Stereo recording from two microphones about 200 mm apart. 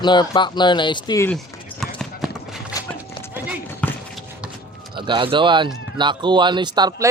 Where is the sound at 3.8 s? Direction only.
5° left (ahead or behind).